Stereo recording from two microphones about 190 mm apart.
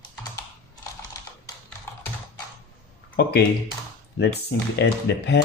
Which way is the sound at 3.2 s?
55° left (ahead or behind).